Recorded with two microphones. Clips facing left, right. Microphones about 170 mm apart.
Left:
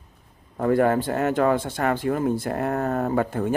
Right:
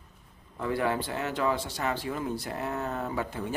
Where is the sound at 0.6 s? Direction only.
50° left (ahead or behind).